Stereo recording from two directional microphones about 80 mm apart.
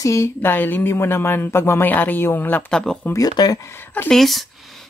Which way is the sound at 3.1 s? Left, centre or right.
Left.